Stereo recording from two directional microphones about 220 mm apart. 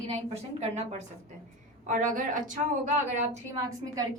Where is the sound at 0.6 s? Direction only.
30° right (ahead or behind).